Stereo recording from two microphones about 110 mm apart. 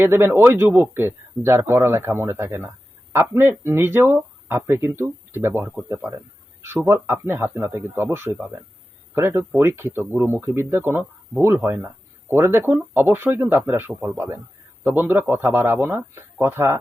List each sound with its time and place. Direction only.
0.0 s a man's voice: 20° right (ahead or behind)